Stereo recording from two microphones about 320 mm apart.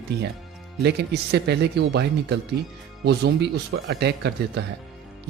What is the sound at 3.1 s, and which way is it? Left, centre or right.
Speech, right.